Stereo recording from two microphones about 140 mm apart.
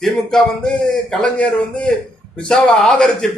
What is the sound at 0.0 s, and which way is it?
A man's voice, 5° left (ahead or behind).